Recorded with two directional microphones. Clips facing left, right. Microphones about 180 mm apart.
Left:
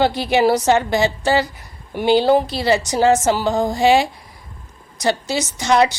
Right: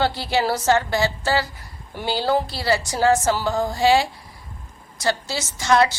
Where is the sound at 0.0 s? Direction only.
15° left (ahead or behind).